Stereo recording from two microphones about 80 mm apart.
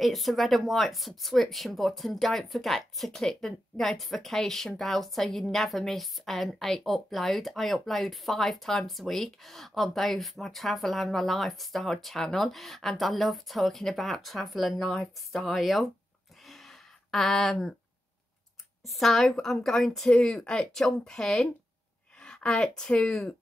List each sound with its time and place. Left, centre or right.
0.0 s speech: centre
16.4 s a sound: centre
18.9 s speech: centre